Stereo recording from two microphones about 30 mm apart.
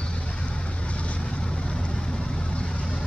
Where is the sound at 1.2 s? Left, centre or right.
Left.